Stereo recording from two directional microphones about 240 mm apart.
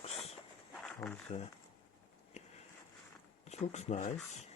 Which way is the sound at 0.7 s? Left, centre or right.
Centre.